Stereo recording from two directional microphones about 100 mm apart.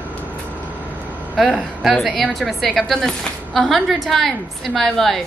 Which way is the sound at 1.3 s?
Centre (ahead or behind).